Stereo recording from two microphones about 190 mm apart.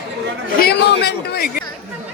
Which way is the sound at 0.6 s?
60° left (ahead or behind).